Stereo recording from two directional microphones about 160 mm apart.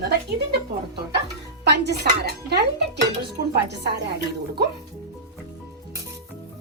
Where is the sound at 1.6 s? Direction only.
90° right.